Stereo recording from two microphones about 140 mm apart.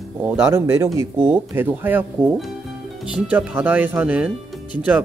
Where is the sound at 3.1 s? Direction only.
10° right (ahead or behind).